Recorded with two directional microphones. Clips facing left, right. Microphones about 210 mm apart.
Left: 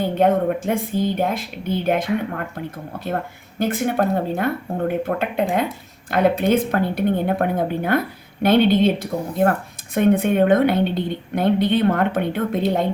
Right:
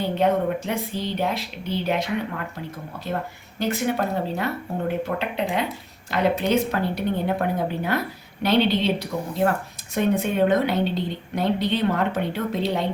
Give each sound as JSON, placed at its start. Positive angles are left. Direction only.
{"t": 0.0, "sound": "a woman's voice", "side_deg": 50}
{"t": 3.6, "sound": "a woman's voice", "side_deg": 50}